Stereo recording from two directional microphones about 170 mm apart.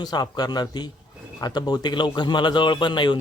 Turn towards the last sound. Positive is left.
turn(degrees=25)  # may be behind; listen again after turning